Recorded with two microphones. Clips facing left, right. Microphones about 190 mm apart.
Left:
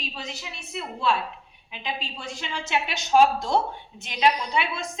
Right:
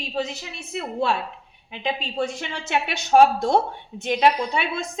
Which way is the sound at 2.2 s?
60° right (ahead or behind).